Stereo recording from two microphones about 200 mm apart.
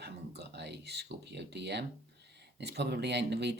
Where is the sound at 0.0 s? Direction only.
55° right (ahead or behind).